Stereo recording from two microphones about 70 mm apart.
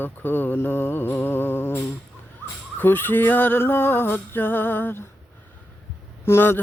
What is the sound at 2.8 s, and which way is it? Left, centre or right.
Speech, left.